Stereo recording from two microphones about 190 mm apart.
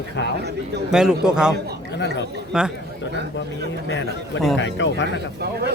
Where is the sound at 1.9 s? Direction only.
65° left (ahead or behind).